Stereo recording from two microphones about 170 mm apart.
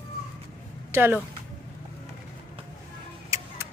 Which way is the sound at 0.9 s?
15° right (ahead or behind).